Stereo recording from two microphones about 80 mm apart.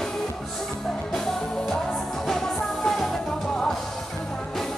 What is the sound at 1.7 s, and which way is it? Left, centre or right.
Music, centre.